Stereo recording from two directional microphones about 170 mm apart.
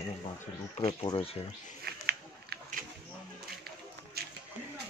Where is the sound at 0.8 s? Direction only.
35° left (ahead or behind).